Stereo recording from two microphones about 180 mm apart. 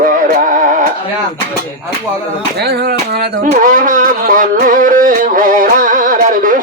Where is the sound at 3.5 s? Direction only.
45° right (ahead or behind).